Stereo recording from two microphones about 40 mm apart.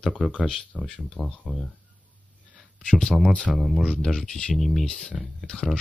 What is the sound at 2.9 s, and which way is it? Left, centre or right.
Speech, centre.